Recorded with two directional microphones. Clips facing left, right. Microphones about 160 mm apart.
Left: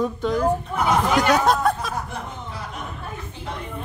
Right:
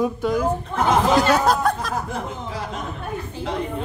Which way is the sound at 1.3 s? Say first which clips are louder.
Even; centre (ahead or behind).